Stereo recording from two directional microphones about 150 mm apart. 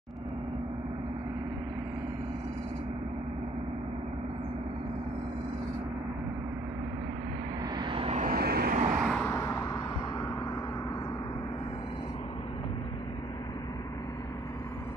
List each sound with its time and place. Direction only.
7.8 s vehicle: 35° right (ahead or behind)
8.2 s vehicle: 85° right
8.9 s vehicle: centre (ahead or behind)
9.3 s vehicle: 15° left (ahead or behind)